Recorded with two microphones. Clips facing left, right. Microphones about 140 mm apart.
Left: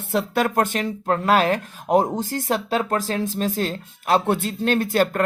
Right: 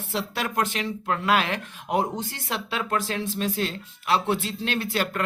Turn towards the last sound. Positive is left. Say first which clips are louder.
# left 7 dB
turn(degrees=45)  # may be behind; listen again after turning